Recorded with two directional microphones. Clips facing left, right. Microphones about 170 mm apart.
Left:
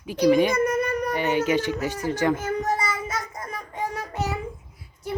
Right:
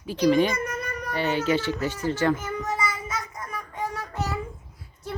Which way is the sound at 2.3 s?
40° left (ahead or behind).